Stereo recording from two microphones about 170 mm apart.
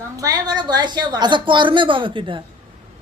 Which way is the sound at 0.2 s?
25° right (ahead or behind).